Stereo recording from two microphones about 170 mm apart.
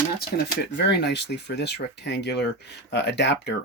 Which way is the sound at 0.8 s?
85° left.